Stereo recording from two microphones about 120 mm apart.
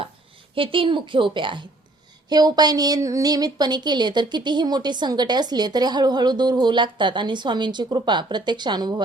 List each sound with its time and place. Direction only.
0.5 s a woman's voice: 45° right (ahead or behind)